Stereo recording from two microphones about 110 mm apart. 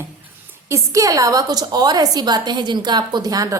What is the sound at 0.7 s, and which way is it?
A woman's voice, 30° right (ahead or behind).